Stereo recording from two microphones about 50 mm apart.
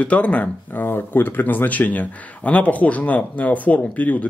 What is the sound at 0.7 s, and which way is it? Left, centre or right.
Speech, left.